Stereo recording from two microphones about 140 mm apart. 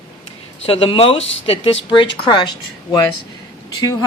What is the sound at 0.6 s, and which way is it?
Speech, 40° left (ahead or behind).